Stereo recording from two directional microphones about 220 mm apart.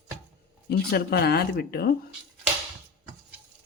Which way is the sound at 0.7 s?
45° left (ahead or behind).